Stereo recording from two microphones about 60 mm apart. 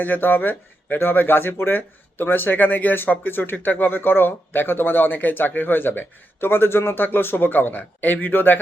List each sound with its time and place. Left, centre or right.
0.0 s speech: left